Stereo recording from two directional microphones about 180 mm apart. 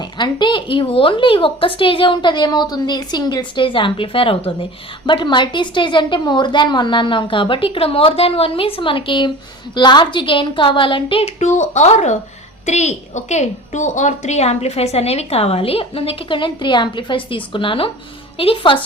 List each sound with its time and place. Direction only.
0.2 s a woman's voice: 25° left (ahead or behind)